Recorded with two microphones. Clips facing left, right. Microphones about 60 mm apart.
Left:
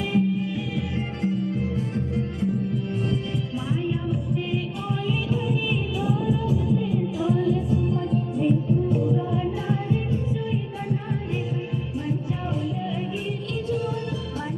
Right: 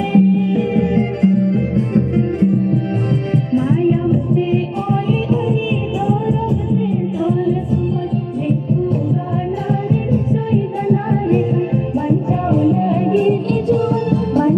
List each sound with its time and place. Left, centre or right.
0.1 s music: right
5.3 s heart sounds: right
6.2 s music: right
7.2 s music: centre
8.5 s music: right